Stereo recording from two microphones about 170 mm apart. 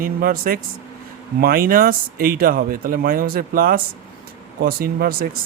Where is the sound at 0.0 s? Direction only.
60° right (ahead or behind).